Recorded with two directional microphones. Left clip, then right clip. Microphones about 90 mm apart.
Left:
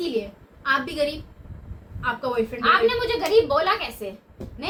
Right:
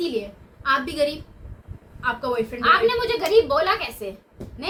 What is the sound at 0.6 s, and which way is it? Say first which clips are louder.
A woman's voice: right 1 dB; 45° right (ahead or behind).